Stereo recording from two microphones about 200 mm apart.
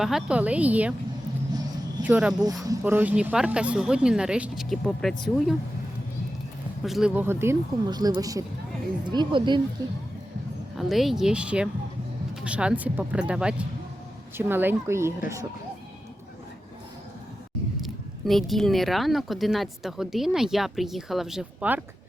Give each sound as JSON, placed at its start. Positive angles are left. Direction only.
{"t": 0.0, "sound": "speech", "side_deg": 0}
{"t": 2.0, "sound": "speech", "side_deg": -5}
{"t": 6.8, "sound": "speech", "side_deg": 0}
{"t": 10.8, "sound": "speech", "side_deg": 0}
{"t": 17.8, "sound": "speech", "side_deg": 0}